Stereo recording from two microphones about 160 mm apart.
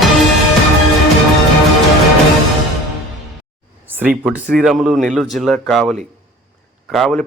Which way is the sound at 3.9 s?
10° right (ahead or behind).